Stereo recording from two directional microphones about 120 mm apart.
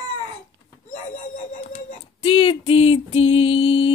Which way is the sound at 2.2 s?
50° left (ahead or behind).